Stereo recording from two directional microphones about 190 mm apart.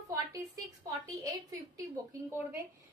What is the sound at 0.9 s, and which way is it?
Speech, 20° right (ahead or behind).